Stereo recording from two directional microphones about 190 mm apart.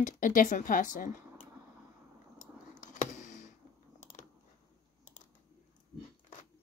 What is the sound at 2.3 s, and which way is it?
Clicking, 40° left (ahead or behind).